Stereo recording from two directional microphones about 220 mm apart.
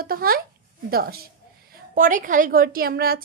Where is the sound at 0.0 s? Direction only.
40° right (ahead or behind).